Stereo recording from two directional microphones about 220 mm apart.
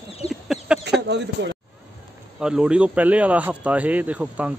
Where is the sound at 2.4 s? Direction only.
5° right (ahead or behind).